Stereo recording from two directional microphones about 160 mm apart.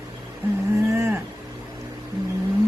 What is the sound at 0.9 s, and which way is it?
Speech, 15° right (ahead or behind).